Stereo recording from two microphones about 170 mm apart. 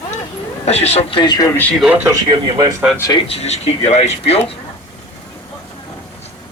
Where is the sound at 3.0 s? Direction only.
20° left (ahead or behind).